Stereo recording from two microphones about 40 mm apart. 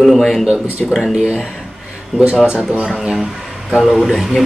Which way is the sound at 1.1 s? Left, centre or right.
Centre.